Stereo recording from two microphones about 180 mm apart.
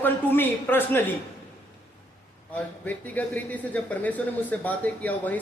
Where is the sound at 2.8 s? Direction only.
10° left (ahead or behind).